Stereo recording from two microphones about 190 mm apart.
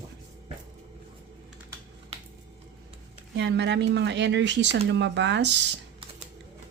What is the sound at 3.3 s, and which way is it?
Speech, 65° right (ahead or behind).